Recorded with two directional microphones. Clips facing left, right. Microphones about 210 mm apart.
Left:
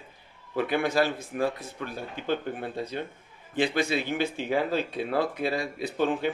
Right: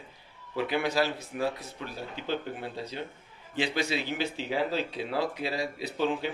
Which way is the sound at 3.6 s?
50° left (ahead or behind).